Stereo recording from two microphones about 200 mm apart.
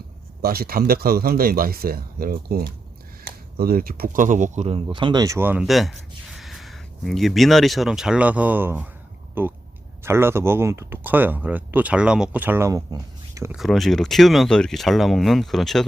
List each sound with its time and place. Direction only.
0.4 s speech: 50° right (ahead or behind); by 13.6 s 15° right (ahead or behind)
13.6 s speech: centre (ahead or behind)